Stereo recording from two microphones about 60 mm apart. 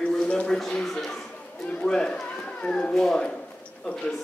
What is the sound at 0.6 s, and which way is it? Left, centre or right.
Speech, centre.